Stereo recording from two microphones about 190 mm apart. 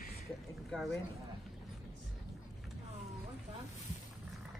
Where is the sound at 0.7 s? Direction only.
Centre (ahead or behind).